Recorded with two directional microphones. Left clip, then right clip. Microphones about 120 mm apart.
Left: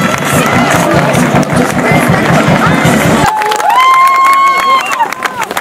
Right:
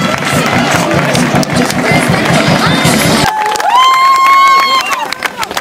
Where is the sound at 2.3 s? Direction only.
20° right (ahead or behind).